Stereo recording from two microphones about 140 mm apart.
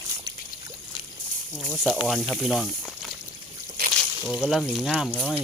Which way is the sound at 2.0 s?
Centre (ahead or behind).